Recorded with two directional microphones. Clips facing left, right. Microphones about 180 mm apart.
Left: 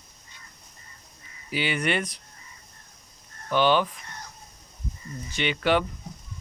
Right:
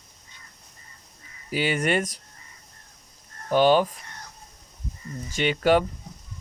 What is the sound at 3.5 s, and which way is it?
Speech, 40° right (ahead or behind).